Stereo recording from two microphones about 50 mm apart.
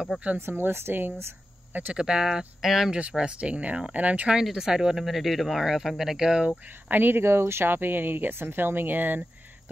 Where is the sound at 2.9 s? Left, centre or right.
Centre.